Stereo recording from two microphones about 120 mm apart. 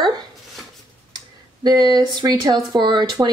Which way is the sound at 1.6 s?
35° right (ahead or behind).